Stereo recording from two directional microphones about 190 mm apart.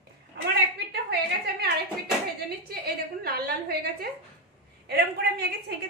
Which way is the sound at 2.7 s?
55° right (ahead or behind).